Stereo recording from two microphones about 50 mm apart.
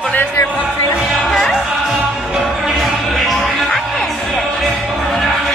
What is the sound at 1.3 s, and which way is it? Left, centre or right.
Music, centre.